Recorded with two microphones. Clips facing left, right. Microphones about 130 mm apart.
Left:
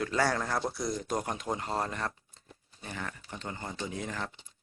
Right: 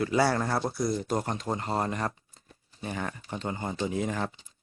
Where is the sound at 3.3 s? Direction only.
20° right (ahead or behind).